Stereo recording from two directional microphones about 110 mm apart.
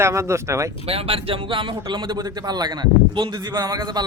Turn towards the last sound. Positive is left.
turn(degrees=-35)  # may be behind; listen again after turning